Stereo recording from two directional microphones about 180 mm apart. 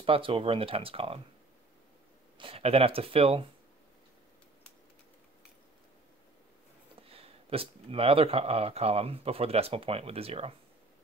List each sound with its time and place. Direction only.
0.0 s speech: 30° right (ahead or behind)
2.3 s speech: 30° right (ahead or behind)
7.0 s a sound: 30° right (ahead or behind)
7.9 s speech: 30° right (ahead or behind)